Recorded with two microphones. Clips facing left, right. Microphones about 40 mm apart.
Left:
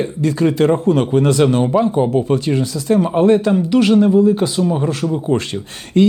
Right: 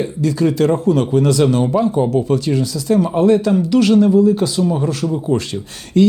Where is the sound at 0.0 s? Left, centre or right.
Left.